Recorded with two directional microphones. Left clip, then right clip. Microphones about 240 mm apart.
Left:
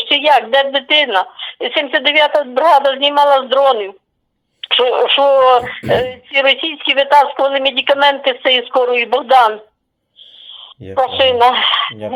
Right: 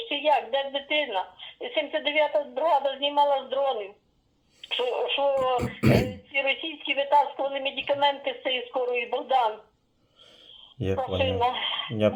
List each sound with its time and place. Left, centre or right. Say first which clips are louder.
0.0 s speech: left 13 dB; left
10.9 s speech: left 15 dB; left